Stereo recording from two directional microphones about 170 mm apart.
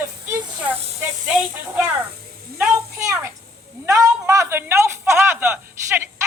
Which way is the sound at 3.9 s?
20° right (ahead or behind).